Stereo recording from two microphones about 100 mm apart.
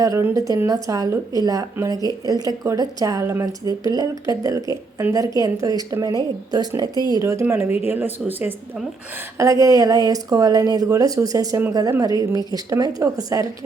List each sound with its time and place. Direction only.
0.0 s speech: 35° right (ahead or behind); by 8.5 s 20° right (ahead or behind)
9.4 s speech: 30° right (ahead or behind)